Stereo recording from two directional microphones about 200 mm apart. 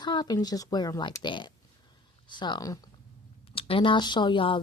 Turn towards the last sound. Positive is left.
turn(degrees=25)  # may be behind; listen again after turning